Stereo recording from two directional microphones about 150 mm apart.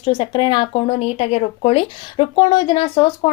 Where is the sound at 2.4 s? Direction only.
30° left (ahead or behind).